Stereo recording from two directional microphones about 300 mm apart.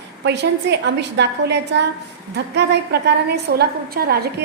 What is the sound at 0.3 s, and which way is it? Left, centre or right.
A woman's voice, right.